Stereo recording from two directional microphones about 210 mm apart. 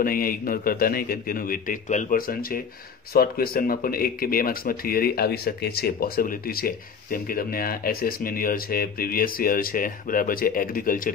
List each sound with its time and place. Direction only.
0.0 s speech: 45° left (ahead or behind)